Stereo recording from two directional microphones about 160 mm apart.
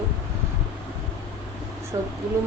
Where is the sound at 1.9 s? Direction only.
20° right (ahead or behind).